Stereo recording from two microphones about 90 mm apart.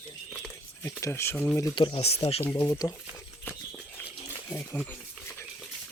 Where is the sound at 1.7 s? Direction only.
80° left.